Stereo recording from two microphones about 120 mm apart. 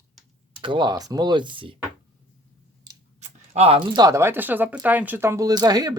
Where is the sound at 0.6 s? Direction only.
40° right (ahead or behind).